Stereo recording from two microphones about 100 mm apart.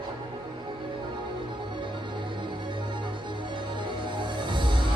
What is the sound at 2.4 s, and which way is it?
Music, 50° right (ahead or behind).